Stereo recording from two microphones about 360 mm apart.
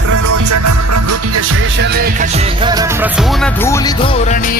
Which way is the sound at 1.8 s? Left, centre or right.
Right.